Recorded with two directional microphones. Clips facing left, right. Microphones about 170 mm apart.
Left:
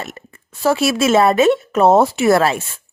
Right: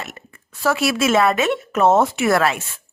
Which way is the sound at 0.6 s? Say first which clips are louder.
Left 3 dB; 25° left (ahead or behind).